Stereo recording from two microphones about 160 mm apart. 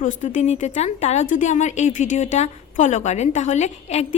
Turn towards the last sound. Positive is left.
turn(degrees=45)  # may be behind; listen again after turning